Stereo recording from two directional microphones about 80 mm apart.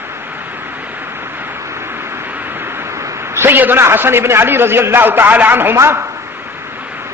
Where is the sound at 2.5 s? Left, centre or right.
Right.